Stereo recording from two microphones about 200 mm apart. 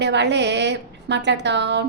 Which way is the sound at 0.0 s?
60° right (ahead or behind).